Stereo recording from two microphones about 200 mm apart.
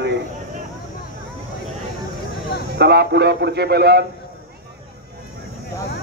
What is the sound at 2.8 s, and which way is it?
A man's voice, 55° right (ahead or behind).